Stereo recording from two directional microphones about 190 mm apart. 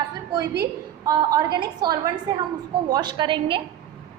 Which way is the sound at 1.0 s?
20° right (ahead or behind).